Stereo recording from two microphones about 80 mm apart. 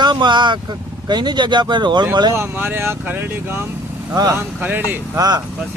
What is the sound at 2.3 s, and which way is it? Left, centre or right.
Speech, right.